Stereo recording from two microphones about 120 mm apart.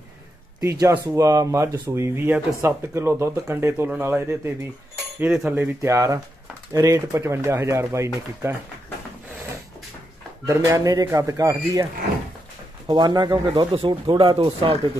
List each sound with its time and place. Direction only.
0.6 s speech: 25° right (ahead or behind)
5.2 s cutlery: 5° right (ahead or behind)
5.5 s speech: 20° right (ahead or behind)
10.4 s speech: 25° right (ahead or behind)
13.7 s speech: 50° right (ahead or behind)